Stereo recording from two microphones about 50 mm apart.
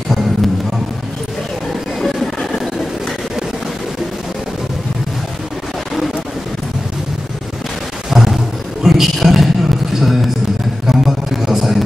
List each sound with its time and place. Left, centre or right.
2.0 s vehicle: centre
8.1 s roar: centre
8.8 s a sound: centre